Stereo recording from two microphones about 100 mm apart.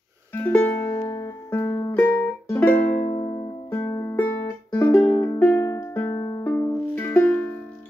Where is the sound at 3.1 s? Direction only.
65° left (ahead or behind).